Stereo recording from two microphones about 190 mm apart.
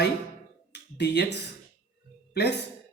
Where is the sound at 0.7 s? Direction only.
65° left (ahead or behind).